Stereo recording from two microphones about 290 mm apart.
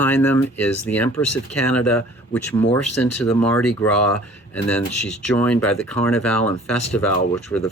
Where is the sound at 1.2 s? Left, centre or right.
Left.